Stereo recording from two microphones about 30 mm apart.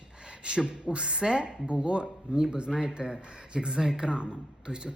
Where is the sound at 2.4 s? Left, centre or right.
Right.